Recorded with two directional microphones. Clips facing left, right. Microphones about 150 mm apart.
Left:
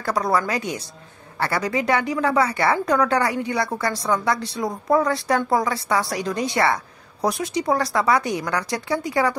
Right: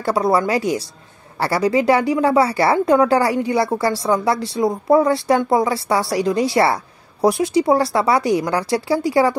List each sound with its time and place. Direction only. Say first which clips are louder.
0.0 s a woman's voice: right 5 dB; 25° right (ahead or behind)